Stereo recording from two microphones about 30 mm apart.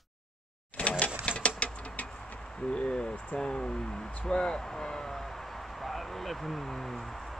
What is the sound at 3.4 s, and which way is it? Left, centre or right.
Speech, left.